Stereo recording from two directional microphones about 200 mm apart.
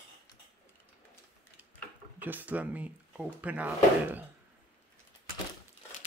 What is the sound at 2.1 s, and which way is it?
Speech, 10° right (ahead or behind).